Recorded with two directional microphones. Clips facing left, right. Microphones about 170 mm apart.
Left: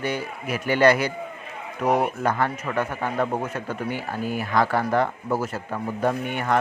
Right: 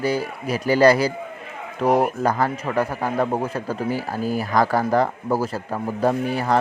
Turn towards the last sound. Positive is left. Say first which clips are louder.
# right 3 dB
turn(degrees=-35)  # may be behind; listen again after turning